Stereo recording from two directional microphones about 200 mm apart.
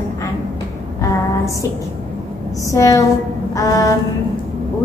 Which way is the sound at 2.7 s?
15° left (ahead or behind).